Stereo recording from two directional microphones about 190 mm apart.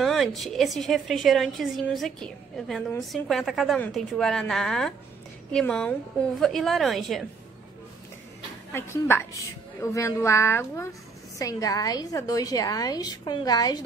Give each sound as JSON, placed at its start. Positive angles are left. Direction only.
{"t": 0.0, "sound": "a woman's voice", "side_deg": 0}
{"t": 8.7, "sound": "a woman's voice", "side_deg": 15}